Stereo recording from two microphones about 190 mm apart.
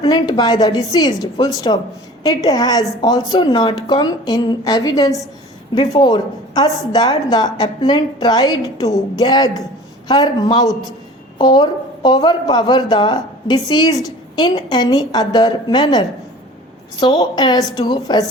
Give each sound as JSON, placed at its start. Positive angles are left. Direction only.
{"t": 0.0, "sound": "a woman's voice", "side_deg": 25}